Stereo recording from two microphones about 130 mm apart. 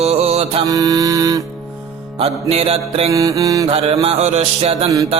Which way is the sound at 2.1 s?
50° right (ahead or behind).